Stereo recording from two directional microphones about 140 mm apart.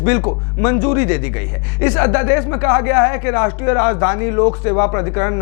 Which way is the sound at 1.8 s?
15° left (ahead or behind).